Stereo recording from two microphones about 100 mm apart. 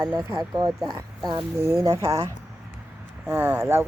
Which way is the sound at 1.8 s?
30° right (ahead or behind).